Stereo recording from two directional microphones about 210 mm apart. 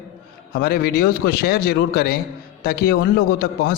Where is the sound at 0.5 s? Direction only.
50° left (ahead or behind).